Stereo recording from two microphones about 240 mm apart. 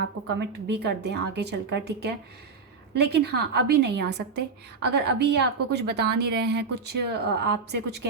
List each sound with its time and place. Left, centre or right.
0.3 s a woman's voice: right